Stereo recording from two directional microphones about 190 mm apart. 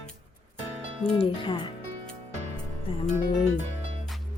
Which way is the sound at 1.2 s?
25° left (ahead or behind).